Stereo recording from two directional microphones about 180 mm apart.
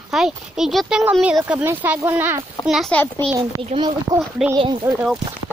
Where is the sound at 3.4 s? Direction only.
25° right (ahead or behind).